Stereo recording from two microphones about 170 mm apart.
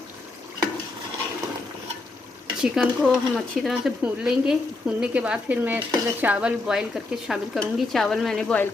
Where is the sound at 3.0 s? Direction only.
5° right (ahead or behind).